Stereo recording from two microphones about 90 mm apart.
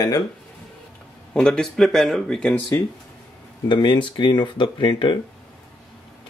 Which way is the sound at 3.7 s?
60° left (ahead or behind).